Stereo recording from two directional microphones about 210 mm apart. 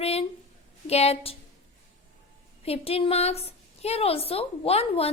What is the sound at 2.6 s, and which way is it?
A woman's voice, 30° left (ahead or behind).